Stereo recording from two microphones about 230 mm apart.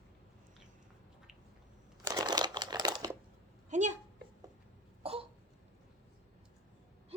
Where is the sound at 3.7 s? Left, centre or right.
Right.